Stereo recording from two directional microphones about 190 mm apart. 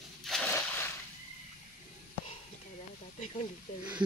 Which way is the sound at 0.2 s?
Centre (ahead or behind).